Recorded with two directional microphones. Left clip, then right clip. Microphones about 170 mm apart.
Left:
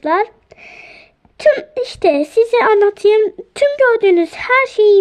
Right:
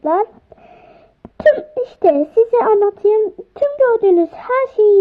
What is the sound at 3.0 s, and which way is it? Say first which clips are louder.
Speech: left 2 dB; 25° left (ahead or behind).